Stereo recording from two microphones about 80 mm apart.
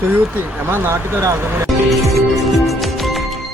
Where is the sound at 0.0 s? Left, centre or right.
Right.